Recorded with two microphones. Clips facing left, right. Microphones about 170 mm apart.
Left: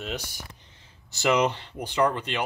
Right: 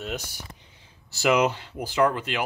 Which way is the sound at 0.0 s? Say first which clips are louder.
Right 1 dB; 5° right (ahead or behind).